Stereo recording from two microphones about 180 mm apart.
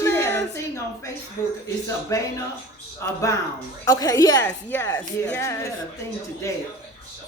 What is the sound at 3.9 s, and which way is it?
Speech, 20° left (ahead or behind).